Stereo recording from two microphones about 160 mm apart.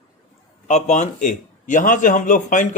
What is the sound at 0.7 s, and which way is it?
Speech, 50° left (ahead or behind).